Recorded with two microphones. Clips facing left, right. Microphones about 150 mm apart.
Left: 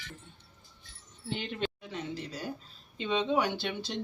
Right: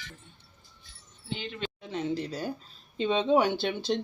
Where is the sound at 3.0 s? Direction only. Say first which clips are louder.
Right 5 dB; 35° right (ahead or behind).